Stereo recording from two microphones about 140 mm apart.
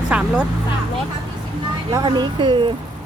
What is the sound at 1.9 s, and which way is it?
Speech, 30° right (ahead or behind).